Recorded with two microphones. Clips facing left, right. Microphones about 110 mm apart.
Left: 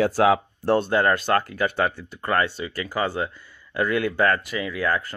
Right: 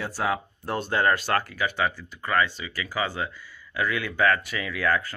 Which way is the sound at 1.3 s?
25° left (ahead or behind).